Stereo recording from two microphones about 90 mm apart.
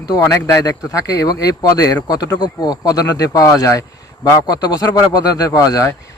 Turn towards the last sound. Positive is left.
turn(degrees=40)  # may be behind; listen again after turning